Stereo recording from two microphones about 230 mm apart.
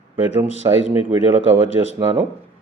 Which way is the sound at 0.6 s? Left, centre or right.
Centre.